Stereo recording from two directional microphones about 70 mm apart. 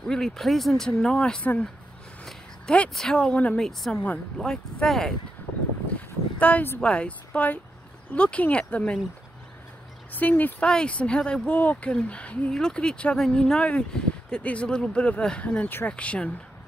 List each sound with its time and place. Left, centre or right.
0.0 s speech: centre
1.4 s speech: left
2.2 s a sound: centre
2.9 s speech: centre
4.4 s speech: centre
4.8 s speech: centre
5.9 s a sound: left
6.8 s speech: centre
10.1 s speech: left